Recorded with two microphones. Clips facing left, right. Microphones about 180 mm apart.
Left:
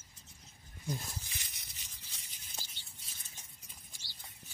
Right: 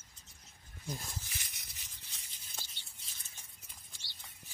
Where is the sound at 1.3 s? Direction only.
20° left (ahead or behind).